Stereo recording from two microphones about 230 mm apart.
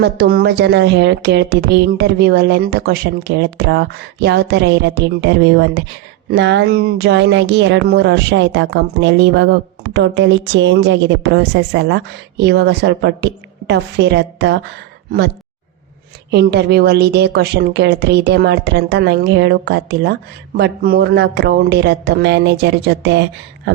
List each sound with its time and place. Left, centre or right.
0.0 s speech: right
16.3 s speech: right